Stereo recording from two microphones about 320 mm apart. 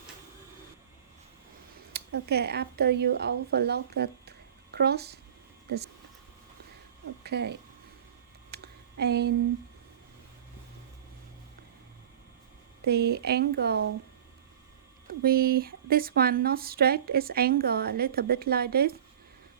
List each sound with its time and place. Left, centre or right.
1.9 s speech: right
7.3 s speech: right
8.5 s a sound: right
12.8 s speech: right
15.2 s speech: right